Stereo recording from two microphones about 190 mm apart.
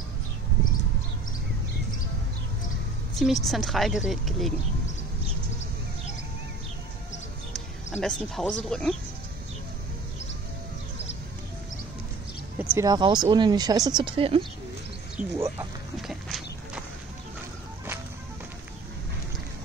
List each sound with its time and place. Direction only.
3.2 s a woman's voice: centre (ahead or behind)
8.0 s a woman's voice: 5° left (ahead or behind)
12.5 s speech: 15° right (ahead or behind)
15.1 s speech: 15° right (ahead or behind)
16.0 s a sound: centre (ahead or behind)